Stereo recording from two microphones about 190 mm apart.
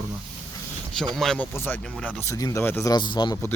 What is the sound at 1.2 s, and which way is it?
Speech, 5° left (ahead or behind).